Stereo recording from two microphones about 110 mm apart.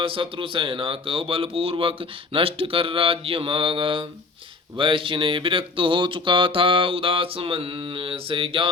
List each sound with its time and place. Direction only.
0.0 s speech: 55° right (ahead or behind)